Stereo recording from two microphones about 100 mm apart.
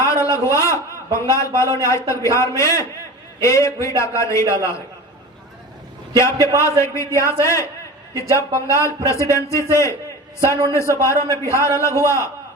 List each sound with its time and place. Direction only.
0.0 s a sound: 30° left (ahead or behind)
1.1 s a man's voice: 30° left (ahead or behind)
6.1 s a man's voice: 30° left (ahead or behind)